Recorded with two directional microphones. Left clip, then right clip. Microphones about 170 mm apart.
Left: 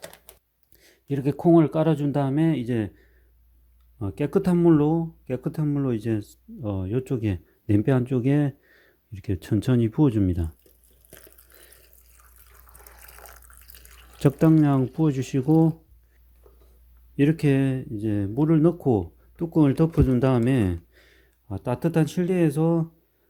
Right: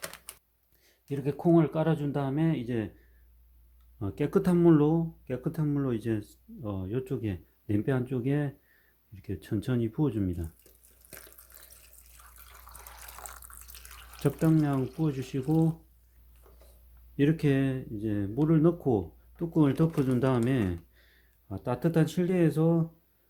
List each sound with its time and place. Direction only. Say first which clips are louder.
0.8 s speech: left 6 dB; 60° left (ahead or behind)
3.9 s speech: left 4 dB; 35° left (ahead or behind); by 10.5 s 50° left (ahead or behind)
11.8 s water: right 1 dB; centre (ahead or behind)
14.2 s speech: left 8 dB; 50° left (ahead or behind)
17.2 s speech: left 5 dB; 50° left (ahead or behind)